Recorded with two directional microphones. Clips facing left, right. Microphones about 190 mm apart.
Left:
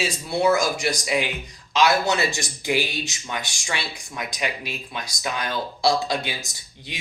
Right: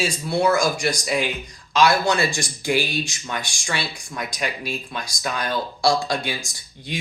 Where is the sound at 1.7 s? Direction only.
20° left (ahead or behind).